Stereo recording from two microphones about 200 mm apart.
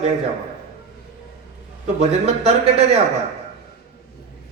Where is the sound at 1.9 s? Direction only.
35° right (ahead or behind).